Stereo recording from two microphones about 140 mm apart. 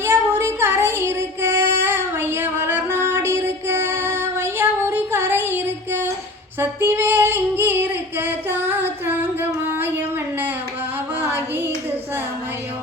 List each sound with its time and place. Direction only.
0.0 s female singing: 15° right (ahead or behind)
11.2 s clapping: 15° right (ahead or behind)